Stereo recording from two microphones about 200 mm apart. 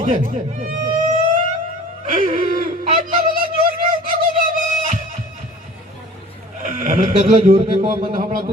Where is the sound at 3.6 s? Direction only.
45° right (ahead or behind).